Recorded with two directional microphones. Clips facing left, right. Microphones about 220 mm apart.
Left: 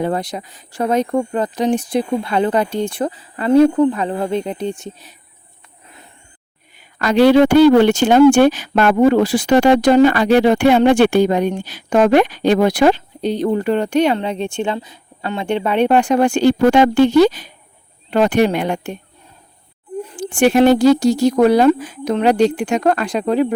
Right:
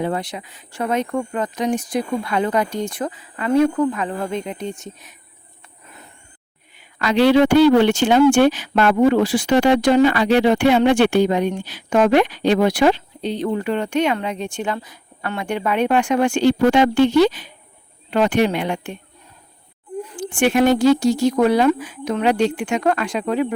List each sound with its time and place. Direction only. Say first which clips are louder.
0.0 s speech: left 3 dB; 40° left (ahead or behind)
6.7 s speech: left 4 dB; 45° left (ahead or behind)
20.3 s speech: left 4 dB; 35° left (ahead or behind)